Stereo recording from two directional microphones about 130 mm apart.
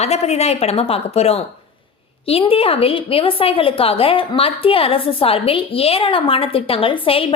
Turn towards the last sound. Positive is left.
turn(degrees=45)  # may be behind; listen again after turning